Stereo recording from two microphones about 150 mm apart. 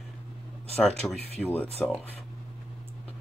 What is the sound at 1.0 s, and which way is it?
Speech, 15° left (ahead or behind).